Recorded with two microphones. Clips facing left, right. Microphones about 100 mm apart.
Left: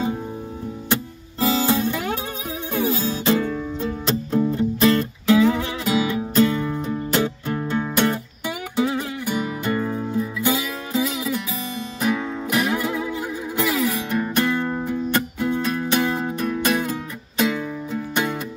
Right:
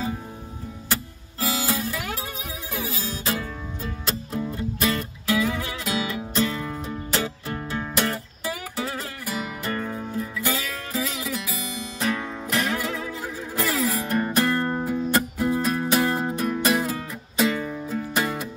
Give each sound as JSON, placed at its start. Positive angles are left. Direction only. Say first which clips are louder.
{"t": 1.4, "sound": "music", "louder": "left 7 dB", "side_deg": 30}
{"t": 10.1, "sound": "music", "louder": "left 5 dB", "side_deg": 0}